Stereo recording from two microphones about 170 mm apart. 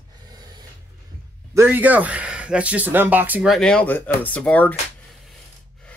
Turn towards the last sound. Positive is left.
turn(degrees=10)  # may be behind; listen again after turning